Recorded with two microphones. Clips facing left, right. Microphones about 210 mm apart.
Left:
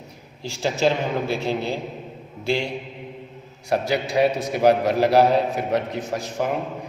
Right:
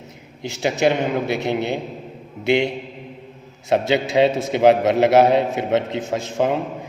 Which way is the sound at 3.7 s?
25° right (ahead or behind).